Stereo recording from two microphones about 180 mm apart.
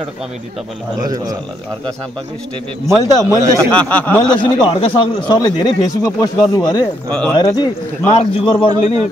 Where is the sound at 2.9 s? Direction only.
15° right (ahead or behind).